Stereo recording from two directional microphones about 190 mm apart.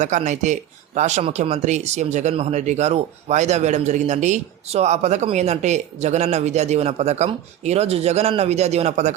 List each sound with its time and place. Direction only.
0.0 s speech: 40° right (ahead or behind)